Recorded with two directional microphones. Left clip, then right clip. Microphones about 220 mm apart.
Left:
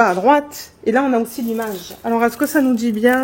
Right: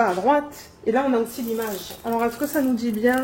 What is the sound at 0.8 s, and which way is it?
Speech, 55° left (ahead or behind).